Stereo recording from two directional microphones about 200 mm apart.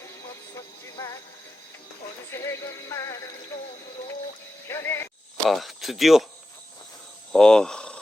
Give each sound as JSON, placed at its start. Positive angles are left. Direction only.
{"t": 0.0, "sound": "music", "side_deg": 15}
{"t": 2.3, "sound": "music", "side_deg": 15}
{"t": 4.7, "sound": "music", "side_deg": 10}
{"t": 5.5, "sound": "speech", "side_deg": 0}
{"t": 7.3, "sound": "speech", "side_deg": 5}